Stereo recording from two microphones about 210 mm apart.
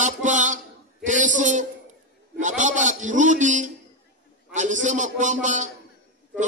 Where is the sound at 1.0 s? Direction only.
35° right (ahead or behind).